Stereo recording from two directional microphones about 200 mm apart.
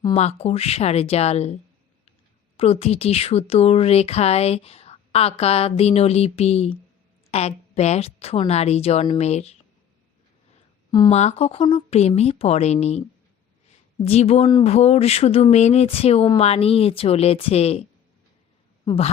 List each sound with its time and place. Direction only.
0.0 s speech: 30° left (ahead or behind)
2.6 s speech: 30° left (ahead or behind)
11.1 s speech: 35° left (ahead or behind)
18.9 s speech: 30° left (ahead or behind)